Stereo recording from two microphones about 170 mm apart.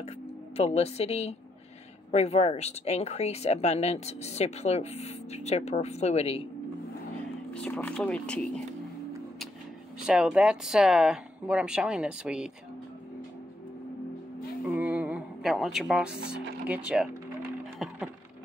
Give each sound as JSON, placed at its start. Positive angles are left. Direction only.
{"t": 0.6, "sound": "speech", "side_deg": 35}
{"t": 7.5, "sound": "speech", "side_deg": 5}
{"t": 9.9, "sound": "speech", "side_deg": -5}
{"t": 14.8, "sound": "a sound", "side_deg": -10}
{"t": 16.3, "sound": "speech", "side_deg": -5}
{"t": 17.7, "sound": "a sound", "side_deg": -5}